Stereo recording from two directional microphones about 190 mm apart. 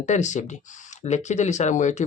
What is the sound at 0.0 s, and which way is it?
Speech, 40° left (ahead or behind).